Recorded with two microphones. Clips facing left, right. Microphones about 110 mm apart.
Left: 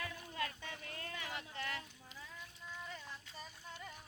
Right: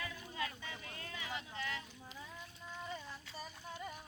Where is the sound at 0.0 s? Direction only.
50° left (ahead or behind).